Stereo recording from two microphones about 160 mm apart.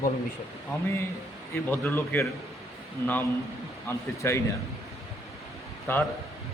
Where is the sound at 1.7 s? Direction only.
15° left (ahead or behind).